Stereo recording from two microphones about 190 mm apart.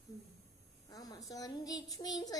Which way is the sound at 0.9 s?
20° left (ahead or behind).